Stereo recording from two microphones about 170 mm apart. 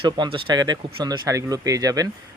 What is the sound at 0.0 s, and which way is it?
Speech, 30° right (ahead or behind).